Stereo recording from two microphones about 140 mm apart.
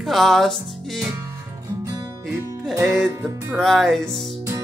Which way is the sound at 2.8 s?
Centre (ahead or behind).